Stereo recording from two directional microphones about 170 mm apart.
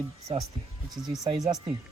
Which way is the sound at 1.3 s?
20° right (ahead or behind).